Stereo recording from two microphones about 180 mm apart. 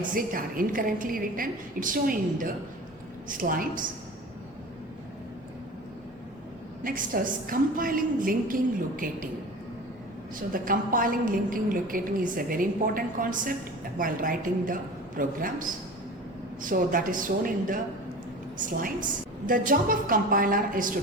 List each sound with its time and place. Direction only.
0.0 s a woman's voice: 50° right (ahead or behind)
6.8 s a woman's voice: 50° right (ahead or behind)
10.5 s a woman's voice: 50° right (ahead or behind)